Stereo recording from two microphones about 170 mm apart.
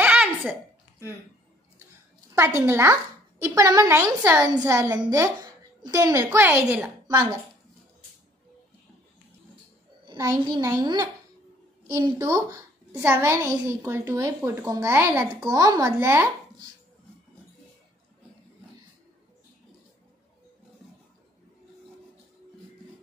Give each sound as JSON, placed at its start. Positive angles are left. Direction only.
{"t": 0.0, "sound": "a sound", "side_deg": -10}
{"t": 2.3, "sound": "a woman's voice", "side_deg": -15}
{"t": 10.1, "sound": "a child's voice", "side_deg": -15}
{"t": 12.2, "sound": "a child's voice", "side_deg": -20}